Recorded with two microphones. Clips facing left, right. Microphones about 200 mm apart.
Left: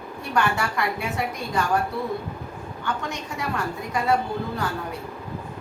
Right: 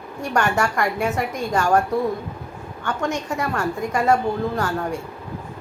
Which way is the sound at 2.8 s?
45° right (ahead or behind).